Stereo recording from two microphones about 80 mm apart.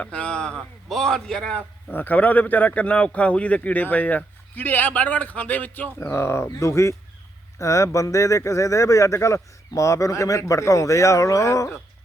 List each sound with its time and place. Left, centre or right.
0.0 s a man's voice: centre
1.9 s speech: left